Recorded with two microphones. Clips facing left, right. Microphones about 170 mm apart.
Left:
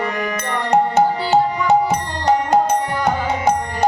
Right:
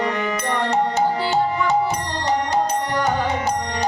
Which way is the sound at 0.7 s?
60° left (ahead or behind).